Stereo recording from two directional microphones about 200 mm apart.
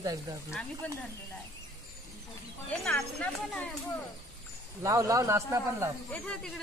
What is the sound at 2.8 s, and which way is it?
Speech, 5° left (ahead or behind).